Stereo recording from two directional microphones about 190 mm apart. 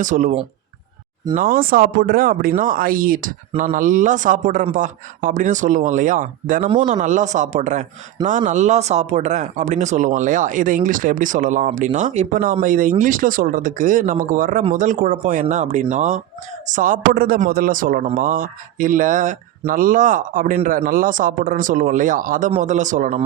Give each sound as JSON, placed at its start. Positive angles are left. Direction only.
{"t": 0.0, "sound": "a man's voice", "side_deg": -40}